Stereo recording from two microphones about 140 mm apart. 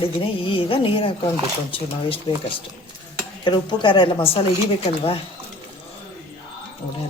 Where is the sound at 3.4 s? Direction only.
35° left (ahead or behind).